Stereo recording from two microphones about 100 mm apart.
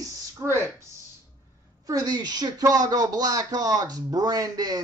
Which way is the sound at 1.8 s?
40° right (ahead or behind).